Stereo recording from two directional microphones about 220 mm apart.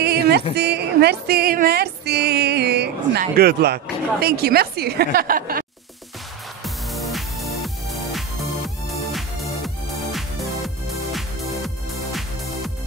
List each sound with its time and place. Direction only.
0.0 s a woman's voice: 50° right (ahead or behind)
6.6 s music: centre (ahead or behind)